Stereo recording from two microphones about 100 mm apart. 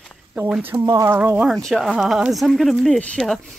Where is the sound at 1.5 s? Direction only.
Centre (ahead or behind).